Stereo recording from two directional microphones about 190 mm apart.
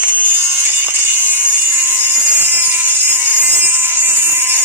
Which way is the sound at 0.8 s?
10° right (ahead or behind).